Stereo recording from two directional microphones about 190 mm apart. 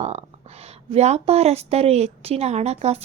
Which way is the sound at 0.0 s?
35° right (ahead or behind).